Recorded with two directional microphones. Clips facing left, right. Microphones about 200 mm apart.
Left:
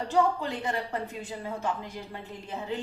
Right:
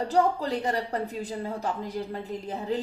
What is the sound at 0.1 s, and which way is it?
A woman's voice, 40° right (ahead or behind).